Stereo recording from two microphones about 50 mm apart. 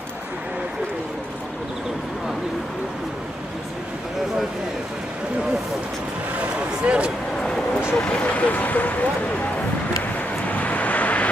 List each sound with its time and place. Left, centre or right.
6.8 s a sound: right
7.9 s vehicle: left
10.4 s vehicle: left